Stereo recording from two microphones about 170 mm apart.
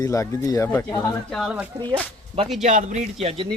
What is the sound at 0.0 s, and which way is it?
Speech, 20° left (ahead or behind).